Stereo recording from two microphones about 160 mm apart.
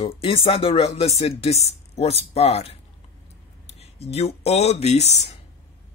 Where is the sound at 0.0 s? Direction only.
35° left (ahead or behind).